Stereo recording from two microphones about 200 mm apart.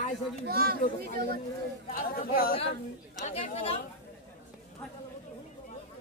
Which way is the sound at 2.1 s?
45° left (ahead or behind).